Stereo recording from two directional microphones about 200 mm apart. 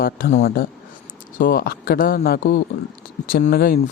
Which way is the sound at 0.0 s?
45° left (ahead or behind).